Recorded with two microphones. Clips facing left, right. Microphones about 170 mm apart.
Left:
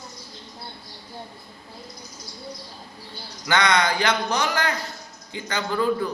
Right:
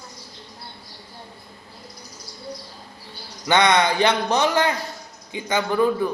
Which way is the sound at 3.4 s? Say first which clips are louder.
Right 3 dB; 25° right (ahead or behind).